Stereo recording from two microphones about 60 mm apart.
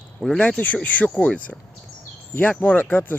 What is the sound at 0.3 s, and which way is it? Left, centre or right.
Speech, left.